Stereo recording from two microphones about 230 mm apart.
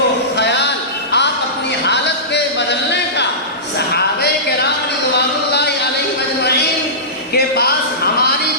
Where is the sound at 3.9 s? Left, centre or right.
Left.